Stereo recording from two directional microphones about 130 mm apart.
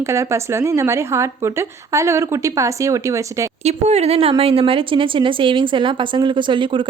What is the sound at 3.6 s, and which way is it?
Speech, 55° right (ahead or behind).